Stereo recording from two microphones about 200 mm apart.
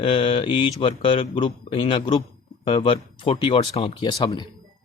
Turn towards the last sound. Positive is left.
turn(degrees=20)  # may be behind; listen again after turning